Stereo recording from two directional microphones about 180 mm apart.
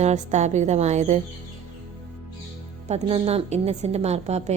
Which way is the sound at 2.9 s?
35° right (ahead or behind).